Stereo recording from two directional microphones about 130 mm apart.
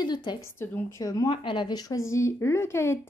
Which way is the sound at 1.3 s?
40° left (ahead or behind).